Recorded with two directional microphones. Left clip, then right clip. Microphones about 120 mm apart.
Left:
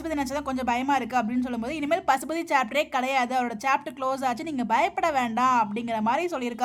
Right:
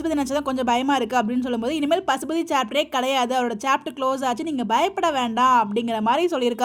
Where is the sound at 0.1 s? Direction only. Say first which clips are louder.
Right 3 dB; 35° right (ahead or behind).